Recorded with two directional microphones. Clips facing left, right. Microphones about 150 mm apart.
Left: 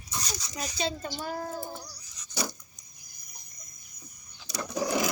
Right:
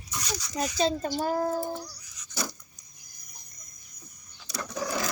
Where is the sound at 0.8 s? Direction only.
40° right (ahead or behind).